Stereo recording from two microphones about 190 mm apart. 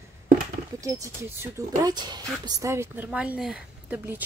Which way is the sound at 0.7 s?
15° right (ahead or behind).